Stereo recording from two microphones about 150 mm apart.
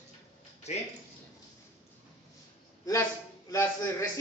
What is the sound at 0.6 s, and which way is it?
Speech, 50° left (ahead or behind).